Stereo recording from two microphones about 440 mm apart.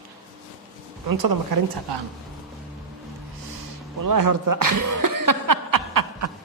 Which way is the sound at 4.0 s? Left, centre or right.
Right.